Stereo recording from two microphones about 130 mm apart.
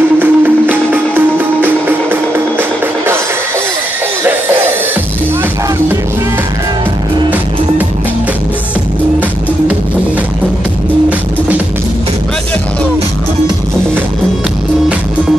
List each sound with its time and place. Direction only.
0.2 s music: 15° right (ahead or behind)
11.1 s music: 10° right (ahead or behind)